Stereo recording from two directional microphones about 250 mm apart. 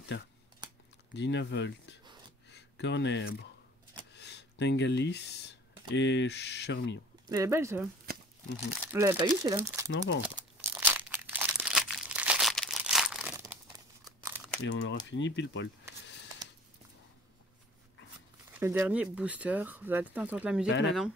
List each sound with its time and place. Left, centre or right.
1.1 s speech: left
4.1 s a sound: left
5.9 s speech: left
7.2 s speech: centre
8.9 s speech: centre
10.2 s crumpling: centre
14.6 s speech: left
18.6 s speech: centre
20.6 s speech: left